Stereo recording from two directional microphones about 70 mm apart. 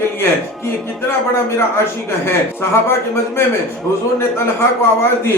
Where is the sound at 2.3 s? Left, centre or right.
Left.